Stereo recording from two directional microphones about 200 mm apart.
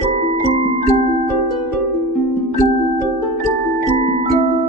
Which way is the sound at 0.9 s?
30° right (ahead or behind).